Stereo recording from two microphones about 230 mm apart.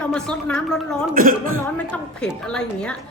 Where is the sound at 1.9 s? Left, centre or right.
Centre.